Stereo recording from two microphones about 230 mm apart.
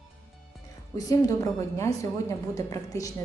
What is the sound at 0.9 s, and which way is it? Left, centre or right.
Speech, centre.